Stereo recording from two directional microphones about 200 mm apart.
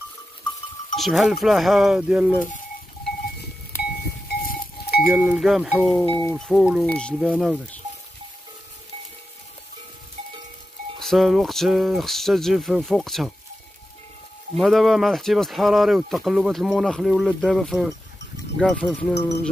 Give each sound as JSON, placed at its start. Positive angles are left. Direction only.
{"t": 0.9, "sound": "speech", "side_deg": 0}
{"t": 3.7, "sound": "livestock", "side_deg": 10}
{"t": 4.3, "sound": "livestock", "side_deg": 50}
{"t": 5.0, "sound": "speech", "side_deg": -5}
{"t": 11.0, "sound": "speech", "side_deg": 0}
{"t": 14.6, "sound": "speech", "side_deg": 0}